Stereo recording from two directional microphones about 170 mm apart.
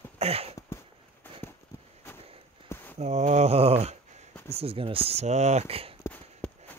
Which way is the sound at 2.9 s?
40° right (ahead or behind).